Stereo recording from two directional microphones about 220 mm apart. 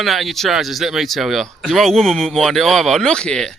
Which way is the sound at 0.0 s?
Centre (ahead or behind).